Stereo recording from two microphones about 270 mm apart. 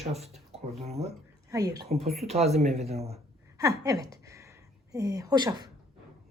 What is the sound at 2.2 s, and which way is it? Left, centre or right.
Speech, right.